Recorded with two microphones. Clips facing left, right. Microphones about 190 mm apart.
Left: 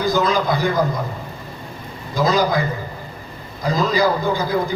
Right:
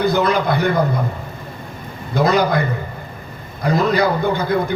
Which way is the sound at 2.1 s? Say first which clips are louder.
Right 2 dB; 65° right (ahead or behind).